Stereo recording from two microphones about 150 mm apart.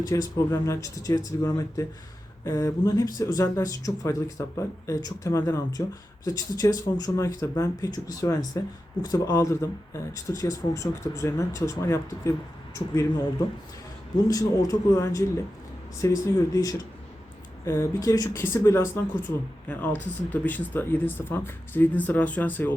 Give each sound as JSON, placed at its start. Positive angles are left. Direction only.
{"t": 0.0, "sound": "speech", "side_deg": 25}
{"t": 14.3, "sound": "speech", "side_deg": 25}